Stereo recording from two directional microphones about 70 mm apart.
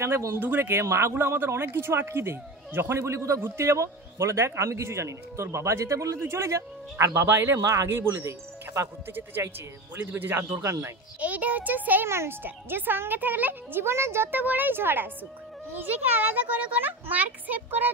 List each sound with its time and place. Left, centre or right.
0.0 s speech: right
0.4 s a man's voice: right
9.1 s a child's voice: right
10.6 s a man's voice: right
11.1 s a child's voice: right
12.1 s a child's voice: right